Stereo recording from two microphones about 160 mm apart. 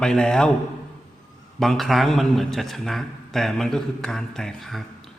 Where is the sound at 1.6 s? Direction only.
Centre (ahead or behind).